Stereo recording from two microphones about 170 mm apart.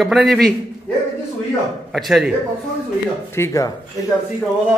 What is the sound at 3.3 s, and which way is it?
Speech, 15° left (ahead or behind).